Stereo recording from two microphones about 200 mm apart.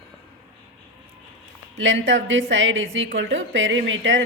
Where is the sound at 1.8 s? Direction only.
65° right (ahead or behind).